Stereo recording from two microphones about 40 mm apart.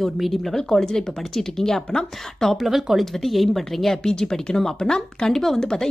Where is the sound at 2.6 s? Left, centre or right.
Centre.